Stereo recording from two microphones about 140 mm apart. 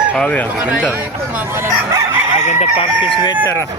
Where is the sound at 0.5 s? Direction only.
10° right (ahead or behind).